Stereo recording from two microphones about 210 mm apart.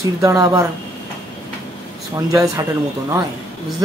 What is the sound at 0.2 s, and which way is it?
Speech, 15° right (ahead or behind).